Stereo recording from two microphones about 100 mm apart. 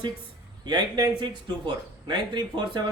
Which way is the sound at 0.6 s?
45° right (ahead or behind).